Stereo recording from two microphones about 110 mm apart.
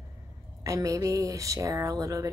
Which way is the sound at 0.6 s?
30° right (ahead or behind).